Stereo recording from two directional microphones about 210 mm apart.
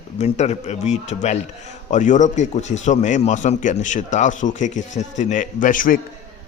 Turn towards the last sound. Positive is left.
turn(degrees=40)  # may be behind; listen again after turning